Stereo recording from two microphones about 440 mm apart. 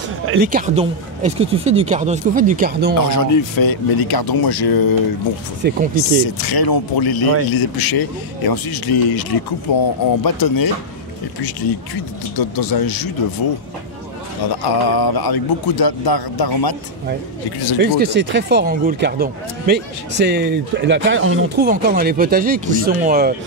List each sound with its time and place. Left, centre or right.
0.3 s speech: centre
3.1 s a man's voice: left
5.6 s speech: right
6.2 s a man's voice: left
14.7 s a man's voice: left
17.7 s speech: right